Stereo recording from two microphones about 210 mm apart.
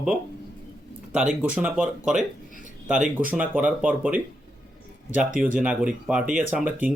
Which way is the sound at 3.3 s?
5° right (ahead or behind).